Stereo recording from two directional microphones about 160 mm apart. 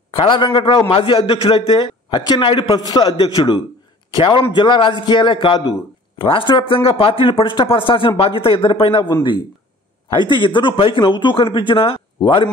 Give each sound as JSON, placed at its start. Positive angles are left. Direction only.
{"t": 0.1, "sound": "a man's voice", "side_deg": 30}